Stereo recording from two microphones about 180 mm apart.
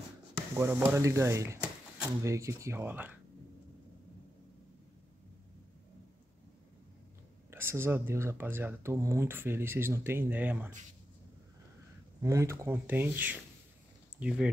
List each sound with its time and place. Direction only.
0.6 s speech: 15° right (ahead or behind)
7.5 s speech: 15° right (ahead or behind)
12.2 s speech: 15° right (ahead or behind)